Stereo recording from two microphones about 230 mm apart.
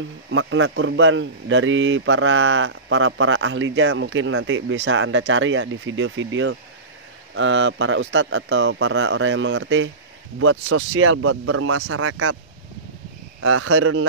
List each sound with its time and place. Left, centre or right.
0.3 s speech: right
13.4 s speech: right